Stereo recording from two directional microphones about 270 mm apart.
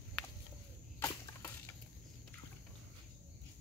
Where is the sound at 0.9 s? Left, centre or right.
Centre.